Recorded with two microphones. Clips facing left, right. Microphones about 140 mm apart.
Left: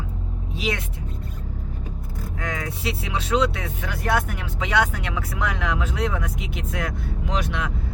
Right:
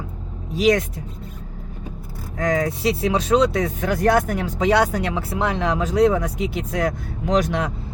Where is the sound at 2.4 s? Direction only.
40° right (ahead or behind).